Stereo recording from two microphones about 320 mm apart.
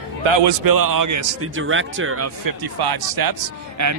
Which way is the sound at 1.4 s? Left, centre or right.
Right.